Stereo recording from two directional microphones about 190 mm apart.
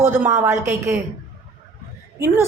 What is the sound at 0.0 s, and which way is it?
A woman's voice, 10° right (ahead or behind).